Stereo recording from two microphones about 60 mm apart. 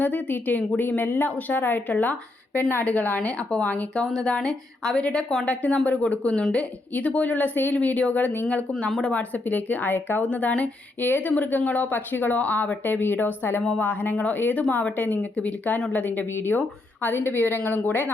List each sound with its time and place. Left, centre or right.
0.0 s speech: left; by 5.0 s centre
5.5 s speech: left
9.0 s speech: centre
9.3 s speech: left
13.6 s speech: centre
13.8 s speech: left